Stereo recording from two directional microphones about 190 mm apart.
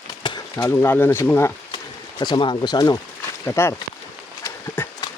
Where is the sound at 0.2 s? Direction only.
20° left (ahead or behind).